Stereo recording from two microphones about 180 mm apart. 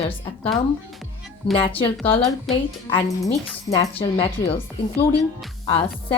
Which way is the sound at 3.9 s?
30° left (ahead or behind).